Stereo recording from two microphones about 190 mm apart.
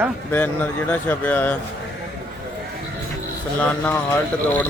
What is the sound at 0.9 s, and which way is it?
Speech, 10° left (ahead or behind).